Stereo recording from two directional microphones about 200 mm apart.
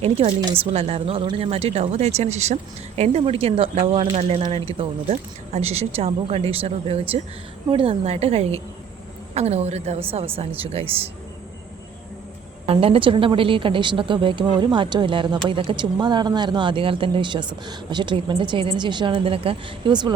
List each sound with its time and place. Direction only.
0.0 s a woman's voice: 30° right (ahead or behind)
12.6 s speech: 30° right (ahead or behind)